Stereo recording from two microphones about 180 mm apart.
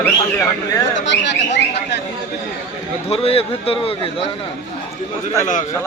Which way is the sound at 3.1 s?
35° left (ahead or behind).